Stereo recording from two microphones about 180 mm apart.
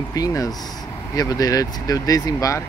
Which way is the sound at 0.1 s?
20° left (ahead or behind).